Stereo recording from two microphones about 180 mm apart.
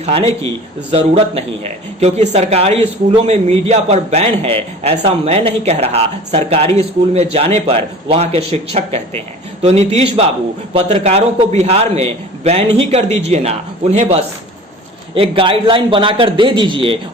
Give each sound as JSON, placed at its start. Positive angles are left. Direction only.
{"t": 0.0, "sound": "a man's voice", "side_deg": -35}